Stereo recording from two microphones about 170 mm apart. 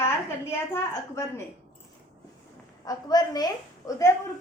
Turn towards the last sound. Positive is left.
turn(degrees=20)  # may be behind; listen again after turning